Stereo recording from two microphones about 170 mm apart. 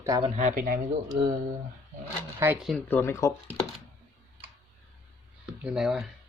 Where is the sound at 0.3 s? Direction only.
50° right (ahead or behind).